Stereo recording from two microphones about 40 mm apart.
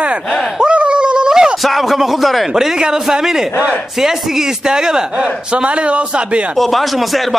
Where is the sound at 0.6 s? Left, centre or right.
Right.